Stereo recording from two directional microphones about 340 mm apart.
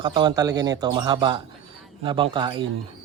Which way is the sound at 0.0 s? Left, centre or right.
Centre.